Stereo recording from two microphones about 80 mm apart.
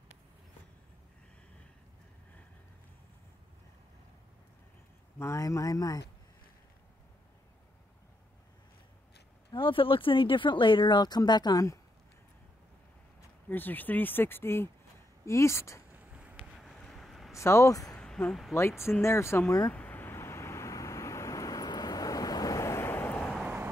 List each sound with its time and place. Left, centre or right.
5.2 s speech: left
9.5 s speech: left
13.5 s speech: left
15.9 s a sound: centre
16.5 s vehicle: centre
17.3 s speech: left
17.9 s a sound: centre
18.5 s speech: left
19.7 s vehicle: left
22.8 s vehicle: left